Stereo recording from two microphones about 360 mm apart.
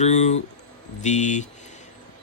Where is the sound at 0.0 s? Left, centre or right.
Centre.